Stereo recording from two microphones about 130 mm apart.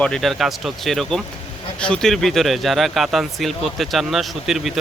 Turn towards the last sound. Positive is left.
turn(degrees=0)  # may be behind; listen again after turning